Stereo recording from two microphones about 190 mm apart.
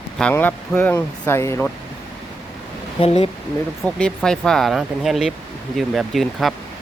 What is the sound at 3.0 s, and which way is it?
Speech, 30° left (ahead or behind).